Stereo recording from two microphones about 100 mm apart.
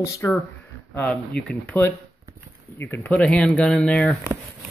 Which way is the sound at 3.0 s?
10° left (ahead or behind).